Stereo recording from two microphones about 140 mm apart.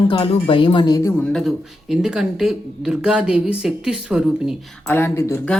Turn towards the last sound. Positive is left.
turn(degrees=20)  # may be behind; listen again after turning